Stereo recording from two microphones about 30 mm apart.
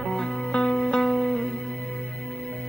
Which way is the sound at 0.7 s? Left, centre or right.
Left.